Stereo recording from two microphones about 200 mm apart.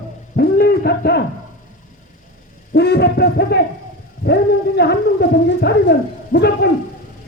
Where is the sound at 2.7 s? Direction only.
55° left (ahead or behind).